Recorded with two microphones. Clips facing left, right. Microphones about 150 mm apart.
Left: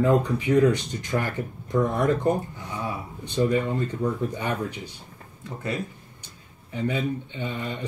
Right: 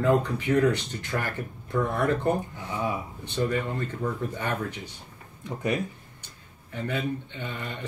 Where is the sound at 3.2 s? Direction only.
15° left (ahead or behind).